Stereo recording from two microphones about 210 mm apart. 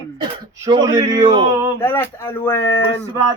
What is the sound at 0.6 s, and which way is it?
A man's voice, 15° right (ahead or behind).